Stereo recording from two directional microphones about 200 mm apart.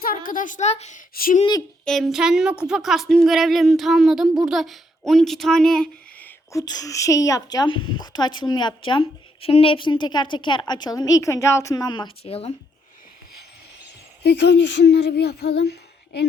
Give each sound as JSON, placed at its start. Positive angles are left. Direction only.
{"t": 0.0, "sound": "a woman's voice", "side_deg": 45}
{"t": 1.8, "sound": "speech", "side_deg": 0}
{"t": 14.3, "sound": "speech", "side_deg": 60}